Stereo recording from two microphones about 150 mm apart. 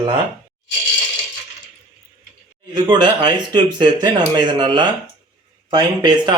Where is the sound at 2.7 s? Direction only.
30° right (ahead or behind).